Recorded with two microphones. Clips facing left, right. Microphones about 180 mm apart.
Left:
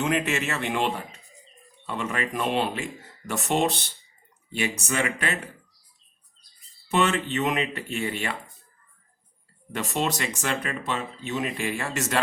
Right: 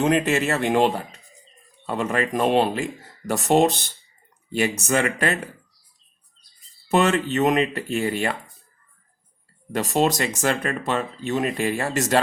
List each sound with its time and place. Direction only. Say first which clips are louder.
0.0 s speech: right 6 dB; 35° right (ahead or behind)
6.9 s speech: right 4 dB; 40° right (ahead or behind)
9.7 s speech: right 6 dB; 40° right (ahead or behind)